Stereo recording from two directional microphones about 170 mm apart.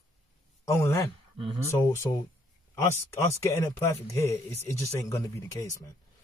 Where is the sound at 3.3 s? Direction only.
15° left (ahead or behind).